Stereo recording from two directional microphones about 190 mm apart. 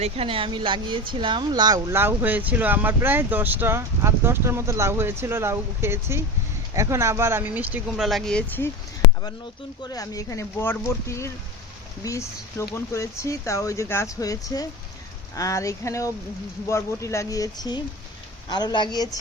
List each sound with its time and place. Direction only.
0.0 s speech: 30° right (ahead or behind); by 8.7 s 10° left (ahead or behind)
9.8 s speech: 20° left (ahead or behind)